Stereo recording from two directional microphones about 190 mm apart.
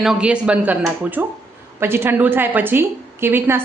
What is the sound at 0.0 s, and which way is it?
A woman's voice, 5° right (ahead or behind).